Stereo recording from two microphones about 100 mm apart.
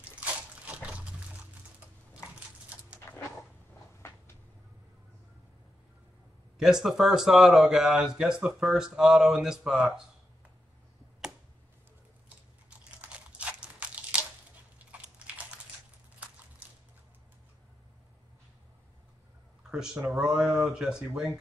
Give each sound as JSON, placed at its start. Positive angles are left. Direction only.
{"t": 0.0, "sound": "a sound", "side_deg": -15}
{"t": 3.1, "sound": "dog", "side_deg": 30}
{"t": 6.6, "sound": "speech", "side_deg": -5}
{"t": 12.6, "sound": "crunch", "side_deg": -15}
{"t": 14.9, "sound": "biting", "side_deg": -10}
{"t": 19.7, "sound": "speech", "side_deg": -5}